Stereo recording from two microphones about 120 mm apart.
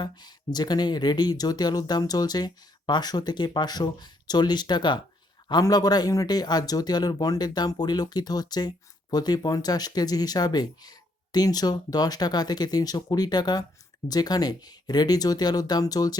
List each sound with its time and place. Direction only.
0.0 s speech: 35° left (ahead or behind)